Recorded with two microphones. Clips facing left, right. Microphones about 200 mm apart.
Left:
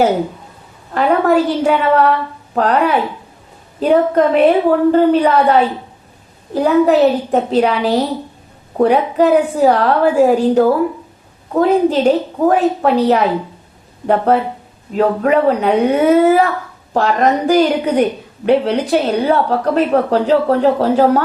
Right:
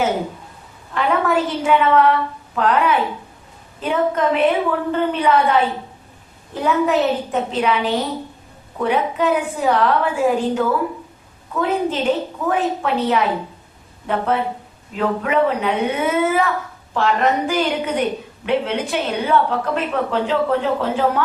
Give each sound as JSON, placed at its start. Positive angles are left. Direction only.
{"t": 0.9, "sound": "a woman's voice", "side_deg": 35}
{"t": 14.9, "sound": "speech", "side_deg": 40}